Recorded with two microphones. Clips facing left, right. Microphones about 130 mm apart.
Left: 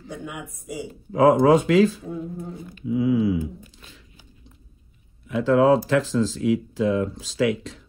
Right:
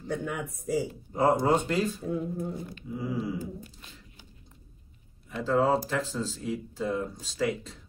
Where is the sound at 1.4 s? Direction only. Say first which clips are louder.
Left 9 dB; 90° left.